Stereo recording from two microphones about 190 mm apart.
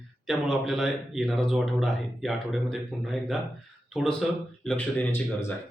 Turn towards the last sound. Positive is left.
turn(degrees=10)  # may be behind; listen again after turning